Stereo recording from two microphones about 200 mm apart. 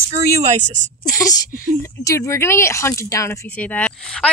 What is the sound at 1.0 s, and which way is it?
A woman's voice, 15° left (ahead or behind).